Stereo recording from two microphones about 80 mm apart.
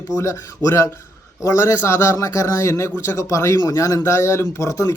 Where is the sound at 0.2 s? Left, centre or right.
Left.